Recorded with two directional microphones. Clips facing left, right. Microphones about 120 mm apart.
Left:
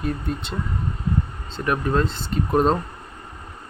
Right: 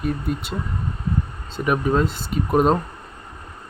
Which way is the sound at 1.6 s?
10° right (ahead or behind).